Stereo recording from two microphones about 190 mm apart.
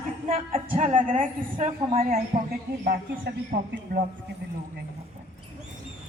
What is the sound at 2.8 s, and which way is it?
A woman's voice, 55° right (ahead or behind).